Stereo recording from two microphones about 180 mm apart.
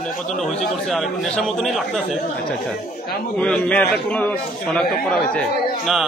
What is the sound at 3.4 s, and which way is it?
A man's voice, 5° left (ahead or behind).